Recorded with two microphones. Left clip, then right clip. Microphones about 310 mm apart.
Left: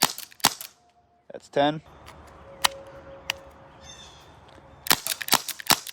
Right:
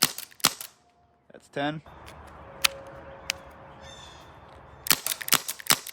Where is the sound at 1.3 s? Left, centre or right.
Centre.